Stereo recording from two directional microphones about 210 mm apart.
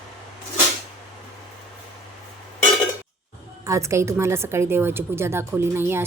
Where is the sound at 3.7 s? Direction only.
15° right (ahead or behind).